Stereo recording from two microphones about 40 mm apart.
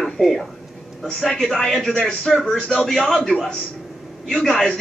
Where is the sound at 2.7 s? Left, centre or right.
Left.